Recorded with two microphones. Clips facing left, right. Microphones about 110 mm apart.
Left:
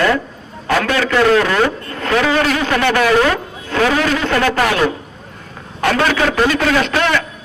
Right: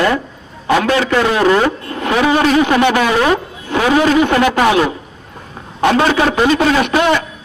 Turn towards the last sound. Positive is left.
turn(degrees=-20)  # may be behind; listen again after turning